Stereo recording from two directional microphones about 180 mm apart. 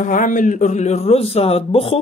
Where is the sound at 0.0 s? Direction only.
45° left (ahead or behind).